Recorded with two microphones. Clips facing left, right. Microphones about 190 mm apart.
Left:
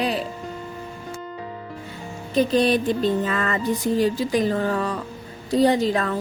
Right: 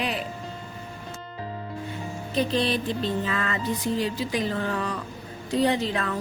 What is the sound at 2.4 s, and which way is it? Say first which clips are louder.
Music: left 6 dB; 45° left (ahead or behind).